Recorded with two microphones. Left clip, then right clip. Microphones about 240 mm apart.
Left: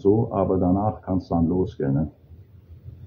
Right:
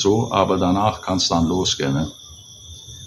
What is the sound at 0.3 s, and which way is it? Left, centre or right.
Speech, centre.